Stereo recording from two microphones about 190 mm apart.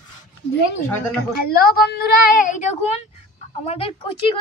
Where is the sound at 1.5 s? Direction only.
55° left (ahead or behind); by 3.9 s 30° left (ahead or behind).